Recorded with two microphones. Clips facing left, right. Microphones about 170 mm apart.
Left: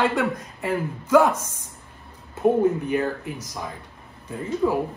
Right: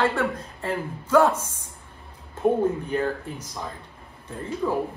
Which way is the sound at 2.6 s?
10° left (ahead or behind).